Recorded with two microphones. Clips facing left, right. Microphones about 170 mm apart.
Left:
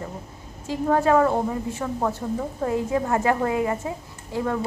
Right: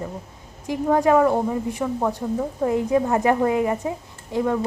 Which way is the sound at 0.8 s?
15° right (ahead or behind).